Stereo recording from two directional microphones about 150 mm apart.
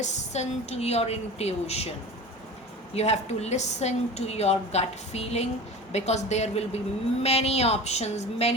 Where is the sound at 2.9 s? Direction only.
45° left (ahead or behind).